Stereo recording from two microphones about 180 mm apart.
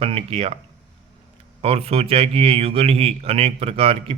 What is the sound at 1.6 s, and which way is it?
A man's voice, 35° right (ahead or behind).